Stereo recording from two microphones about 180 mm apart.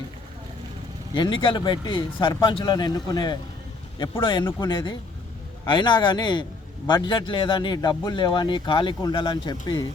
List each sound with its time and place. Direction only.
1.1 s speech: 25° left (ahead or behind)